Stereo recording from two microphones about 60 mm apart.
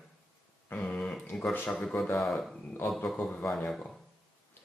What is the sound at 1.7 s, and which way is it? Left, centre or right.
Speech, centre.